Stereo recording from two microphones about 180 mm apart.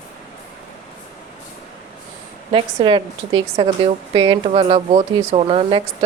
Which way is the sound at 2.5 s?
25° right (ahead or behind).